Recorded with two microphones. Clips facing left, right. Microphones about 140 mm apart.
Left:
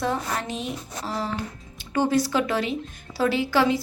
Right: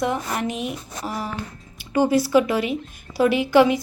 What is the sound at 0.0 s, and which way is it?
A woman's voice, 15° right (ahead or behind).